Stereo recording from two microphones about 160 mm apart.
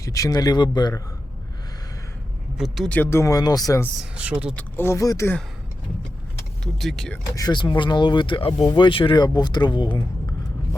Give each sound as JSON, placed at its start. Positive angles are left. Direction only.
{"t": 0.0, "sound": "speech", "side_deg": 20}
{"t": 2.6, "sound": "speech", "side_deg": 0}
{"t": 3.0, "sound": "speech", "side_deg": 15}
{"t": 4.1, "sound": "speech", "side_deg": -10}
{"t": 4.5, "sound": "speech", "side_deg": 15}
{"t": 6.7, "sound": "speech", "side_deg": 0}
{"t": 7.3, "sound": "speech", "side_deg": 25}